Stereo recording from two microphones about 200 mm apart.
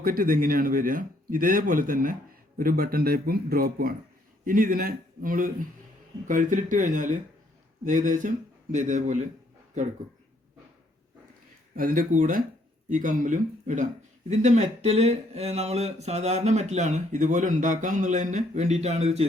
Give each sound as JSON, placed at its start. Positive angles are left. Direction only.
{"t": 0.0, "sound": "a man's voice", "side_deg": -45}
{"t": 11.8, "sound": "a man's voice", "side_deg": -45}